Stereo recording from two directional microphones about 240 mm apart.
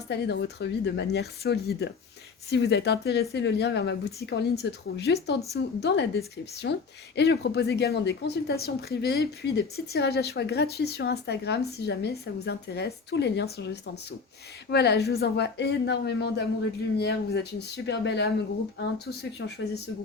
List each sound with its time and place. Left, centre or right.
0.1 s speech: left